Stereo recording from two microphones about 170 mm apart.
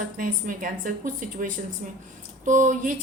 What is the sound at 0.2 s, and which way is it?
A woman's voice, 55° right (ahead or behind).